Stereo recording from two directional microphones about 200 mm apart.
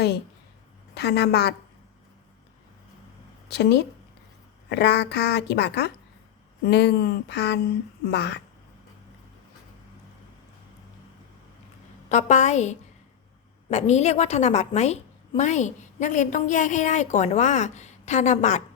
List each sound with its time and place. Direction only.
0.9 s a woman's voice: 55° left (ahead or behind)
3.5 s a woman's voice: 55° left (ahead or behind)
12.0 s a woman's voice: 35° left (ahead or behind)